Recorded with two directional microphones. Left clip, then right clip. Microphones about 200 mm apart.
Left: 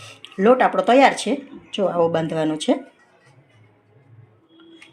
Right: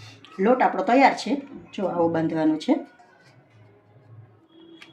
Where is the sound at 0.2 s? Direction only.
40° left (ahead or behind).